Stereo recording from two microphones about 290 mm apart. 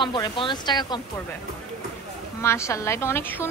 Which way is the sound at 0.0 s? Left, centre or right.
Centre.